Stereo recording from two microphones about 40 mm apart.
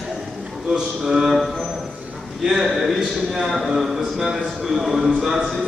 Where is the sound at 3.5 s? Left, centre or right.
Centre.